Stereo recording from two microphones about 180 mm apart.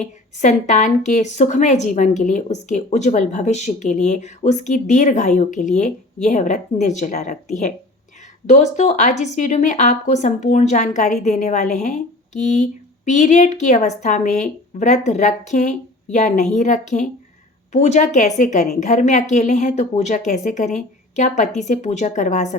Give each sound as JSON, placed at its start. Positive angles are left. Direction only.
{"t": 0.0, "sound": "a woman's voice", "side_deg": 40}